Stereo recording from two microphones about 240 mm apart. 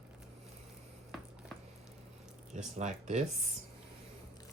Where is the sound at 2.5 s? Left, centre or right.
Right.